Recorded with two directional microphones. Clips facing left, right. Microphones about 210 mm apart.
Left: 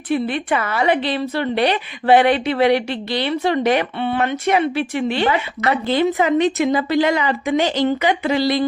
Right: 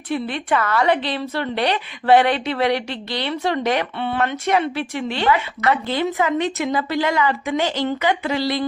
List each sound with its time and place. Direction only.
0.1 s speech: 5° left (ahead or behind)
5.2 s speech: 25° left (ahead or behind)